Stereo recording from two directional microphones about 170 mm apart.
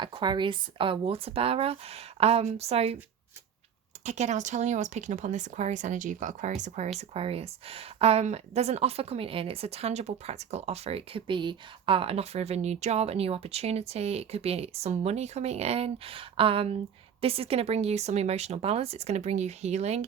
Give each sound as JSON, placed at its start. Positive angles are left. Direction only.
{"t": 0.0, "sound": "speech", "side_deg": -30}
{"t": 4.0, "sound": "speech", "side_deg": -45}